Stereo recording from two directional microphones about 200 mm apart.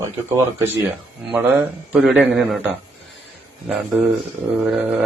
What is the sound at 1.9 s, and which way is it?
Speech, 5° right (ahead or behind).